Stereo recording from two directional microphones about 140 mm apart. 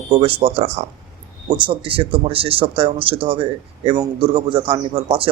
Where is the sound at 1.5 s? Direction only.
35° right (ahead or behind).